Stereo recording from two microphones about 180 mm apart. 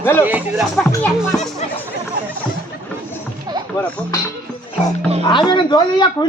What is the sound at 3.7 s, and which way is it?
Music, 20° left (ahead or behind).